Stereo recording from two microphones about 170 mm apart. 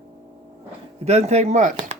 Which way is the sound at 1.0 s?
40° right (ahead or behind).